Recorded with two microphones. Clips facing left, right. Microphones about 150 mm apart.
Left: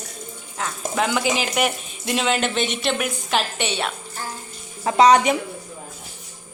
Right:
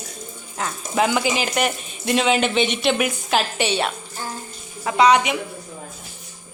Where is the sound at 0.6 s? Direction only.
Centre (ahead or behind).